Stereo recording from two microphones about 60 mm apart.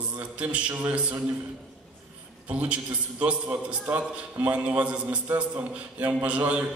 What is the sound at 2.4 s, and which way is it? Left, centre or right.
Speech, right.